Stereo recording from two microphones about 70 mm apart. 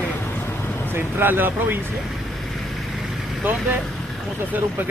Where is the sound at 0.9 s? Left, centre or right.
Right.